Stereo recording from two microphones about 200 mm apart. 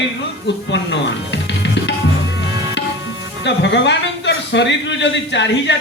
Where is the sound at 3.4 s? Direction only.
60° left (ahead or behind).